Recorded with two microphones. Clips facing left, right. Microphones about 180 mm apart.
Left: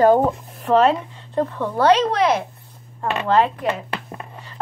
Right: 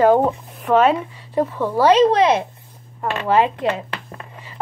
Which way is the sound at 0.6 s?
Centre (ahead or behind).